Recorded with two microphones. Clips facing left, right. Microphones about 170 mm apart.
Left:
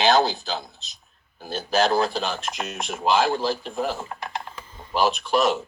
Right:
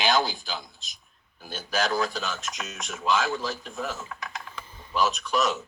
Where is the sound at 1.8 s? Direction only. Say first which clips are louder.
Left 6 dB; 30° left (ahead or behind).